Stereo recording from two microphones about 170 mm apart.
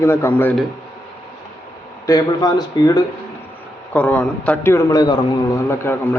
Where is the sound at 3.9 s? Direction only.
10° left (ahead or behind).